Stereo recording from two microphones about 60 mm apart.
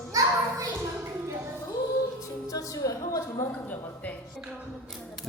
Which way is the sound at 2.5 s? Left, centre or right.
Left.